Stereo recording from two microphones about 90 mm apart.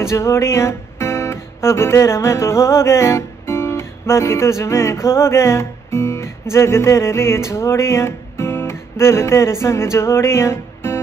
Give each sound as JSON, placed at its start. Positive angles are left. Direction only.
{"t": 0.0, "sound": "music", "side_deg": 30}